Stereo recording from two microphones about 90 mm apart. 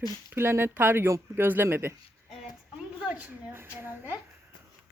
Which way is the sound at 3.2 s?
25° right (ahead or behind).